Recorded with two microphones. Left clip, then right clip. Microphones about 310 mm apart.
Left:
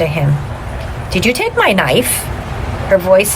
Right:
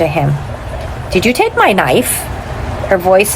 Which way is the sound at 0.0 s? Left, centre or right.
Centre.